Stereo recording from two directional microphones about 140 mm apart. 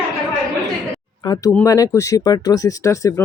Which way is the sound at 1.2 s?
30° left (ahead or behind).